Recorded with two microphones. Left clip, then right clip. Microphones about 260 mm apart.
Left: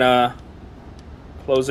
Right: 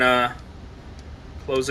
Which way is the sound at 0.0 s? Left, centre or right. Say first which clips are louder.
Left 3 dB; left.